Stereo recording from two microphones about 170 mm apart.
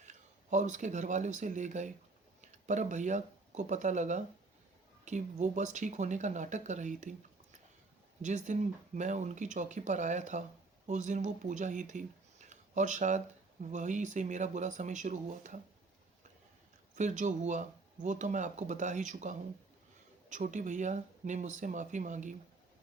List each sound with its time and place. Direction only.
0.0 s speech: 45° right (ahead or behind)
8.2 s speech: 45° right (ahead or behind)
16.9 s speech: 45° right (ahead or behind)